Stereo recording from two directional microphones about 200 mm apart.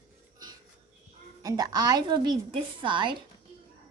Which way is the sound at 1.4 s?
20° right (ahead or behind).